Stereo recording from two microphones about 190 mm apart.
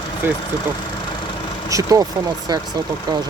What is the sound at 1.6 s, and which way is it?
Speech, 15° right (ahead or behind).